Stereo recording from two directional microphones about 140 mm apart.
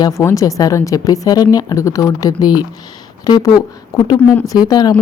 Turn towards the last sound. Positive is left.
turn(degrees=30)  # may be behind; listen again after turning